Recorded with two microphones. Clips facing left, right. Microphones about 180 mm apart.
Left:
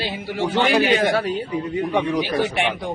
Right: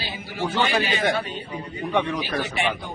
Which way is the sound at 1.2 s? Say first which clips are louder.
Left 7 dB; 90° left.